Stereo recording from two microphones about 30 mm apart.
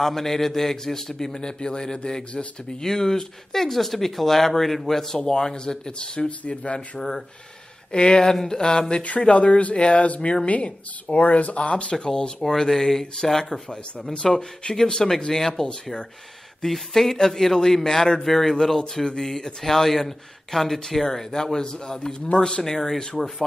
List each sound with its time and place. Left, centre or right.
0.0 s speech: centre
1.4 s speech: left; by 5.1 s centre
5.1 s speech: left
7.0 s speech: centre
7.9 s speech: left
9.3 s speech: left
11.9 s speech: left
12.4 s speech: centre
14.1 s speech: left
15.0 s speech: centre
23.2 s speech: centre